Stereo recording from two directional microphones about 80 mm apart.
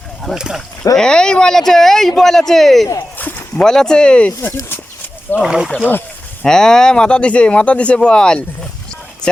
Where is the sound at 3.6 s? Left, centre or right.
Centre.